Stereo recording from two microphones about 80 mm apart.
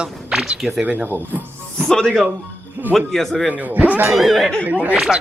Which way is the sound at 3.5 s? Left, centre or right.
Centre.